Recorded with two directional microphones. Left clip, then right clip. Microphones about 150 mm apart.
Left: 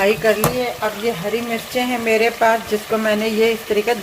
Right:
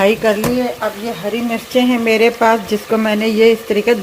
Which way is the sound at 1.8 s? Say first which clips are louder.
Right 5 dB; 45° right (ahead or behind).